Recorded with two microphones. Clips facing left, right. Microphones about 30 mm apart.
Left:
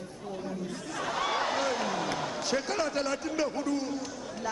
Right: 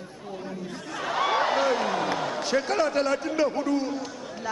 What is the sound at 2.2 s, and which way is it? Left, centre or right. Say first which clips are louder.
A man's voice: right 5 dB; centre.